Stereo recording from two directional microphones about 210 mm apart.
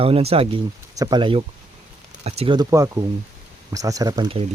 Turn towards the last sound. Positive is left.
turn(degrees=-20)  # may be behind; listen again after turning